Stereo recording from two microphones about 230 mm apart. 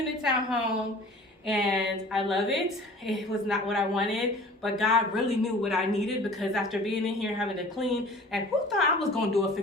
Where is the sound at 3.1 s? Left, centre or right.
Centre.